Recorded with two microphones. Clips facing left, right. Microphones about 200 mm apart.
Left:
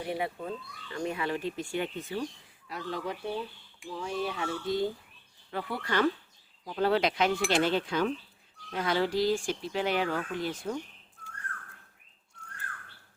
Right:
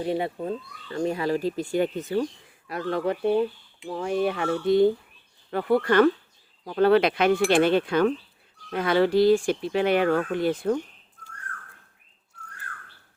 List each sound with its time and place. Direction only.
0.0 s speech: 25° right (ahead or behind); by 2.2 s 40° right (ahead or behind)
2.6 s speech: 60° right (ahead or behind)
5.5 s speech: 50° right (ahead or behind)